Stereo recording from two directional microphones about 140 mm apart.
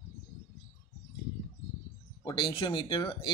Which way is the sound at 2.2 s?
35° left (ahead or behind).